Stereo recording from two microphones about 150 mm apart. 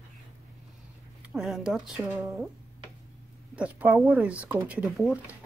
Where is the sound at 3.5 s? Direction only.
10° right (ahead or behind).